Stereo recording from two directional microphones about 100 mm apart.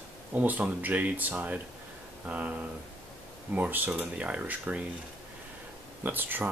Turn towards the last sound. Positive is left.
turn(degrees=-20)  # may be behind; listen again after turning